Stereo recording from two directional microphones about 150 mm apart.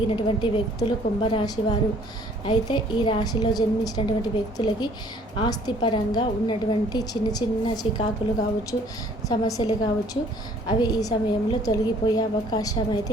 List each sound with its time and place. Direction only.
0.1 s a woman's voice: 35° left (ahead or behind)
9.3 s a woman's voice: 30° left (ahead or behind)